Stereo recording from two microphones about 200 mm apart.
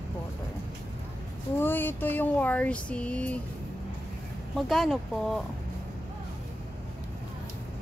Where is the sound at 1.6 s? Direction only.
10° left (ahead or behind).